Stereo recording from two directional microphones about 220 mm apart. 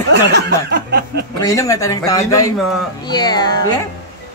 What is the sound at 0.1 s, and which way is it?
Snicker, 50° right (ahead or behind).